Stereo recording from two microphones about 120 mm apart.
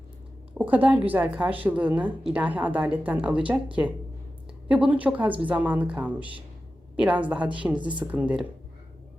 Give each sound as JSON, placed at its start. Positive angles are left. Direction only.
{"t": 0.6, "sound": "a woman's voice", "side_deg": -15}
{"t": 4.7, "sound": "a woman's voice", "side_deg": -10}